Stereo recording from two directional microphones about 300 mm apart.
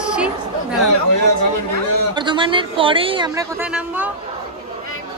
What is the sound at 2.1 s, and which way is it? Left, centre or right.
A woman's voice, centre.